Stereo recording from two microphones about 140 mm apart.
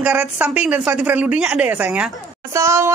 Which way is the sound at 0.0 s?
10° right (ahead or behind).